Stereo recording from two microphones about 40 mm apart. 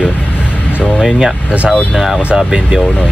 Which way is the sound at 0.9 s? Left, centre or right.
Centre.